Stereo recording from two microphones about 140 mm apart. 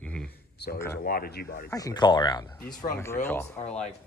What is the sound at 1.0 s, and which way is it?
Speech, 90° left.